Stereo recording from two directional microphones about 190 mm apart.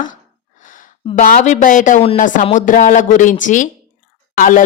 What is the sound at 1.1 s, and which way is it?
Speech, 45° left (ahead or behind).